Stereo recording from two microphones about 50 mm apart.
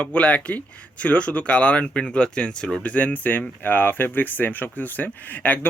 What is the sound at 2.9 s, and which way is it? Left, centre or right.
Speech, left.